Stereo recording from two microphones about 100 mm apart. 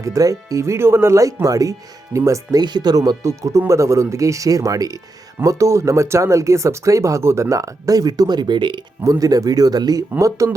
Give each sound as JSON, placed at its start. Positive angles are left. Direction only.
{"t": 0.0, "sound": "speech", "side_deg": -35}
{"t": 9.0, "sound": "speech", "side_deg": -35}